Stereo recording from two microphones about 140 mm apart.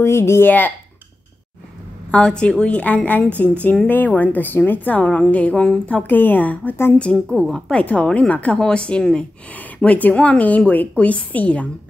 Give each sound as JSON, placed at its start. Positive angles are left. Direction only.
{"t": 0.0, "sound": "a woman's voice", "side_deg": 20}
{"t": 2.0, "sound": "a woman's voice", "side_deg": 5}